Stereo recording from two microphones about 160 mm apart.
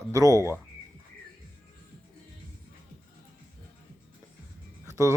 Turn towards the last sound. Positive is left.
turn(degrees=-20)  # may be behind; listen again after turning